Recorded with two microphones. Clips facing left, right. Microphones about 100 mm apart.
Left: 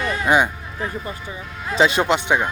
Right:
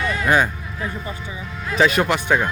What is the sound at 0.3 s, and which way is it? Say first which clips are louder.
Speech: left 1 dB; 20° left (ahead or behind).